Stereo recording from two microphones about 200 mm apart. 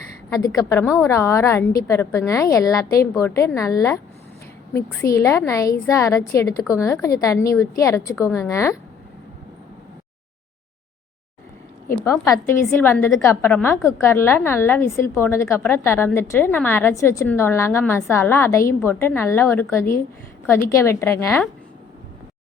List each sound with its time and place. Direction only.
0.3 s a woman's voice: 15° left (ahead or behind)
11.9 s a woman's voice: 15° left (ahead or behind)